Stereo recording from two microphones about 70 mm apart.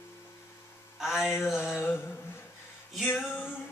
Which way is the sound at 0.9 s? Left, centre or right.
Centre.